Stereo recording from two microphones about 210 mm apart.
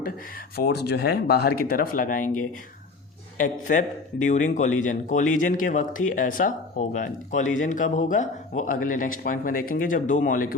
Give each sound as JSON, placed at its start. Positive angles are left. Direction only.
{"t": 0.5, "sound": "speech", "side_deg": 50}
{"t": 3.3, "sound": "speech", "side_deg": 40}